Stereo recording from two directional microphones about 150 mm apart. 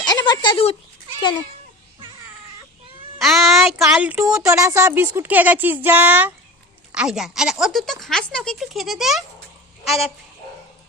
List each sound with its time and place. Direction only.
0.0 s a sound: 25° left (ahead or behind)
1.2 s speech: 30° left (ahead or behind)
3.2 s speech: centre (ahead or behind)
4.5 s speech: 20° right (ahead or behind); by 10.1 s centre (ahead or behind)